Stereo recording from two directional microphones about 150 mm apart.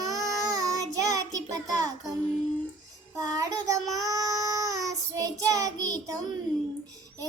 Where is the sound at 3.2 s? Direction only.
25° right (ahead or behind).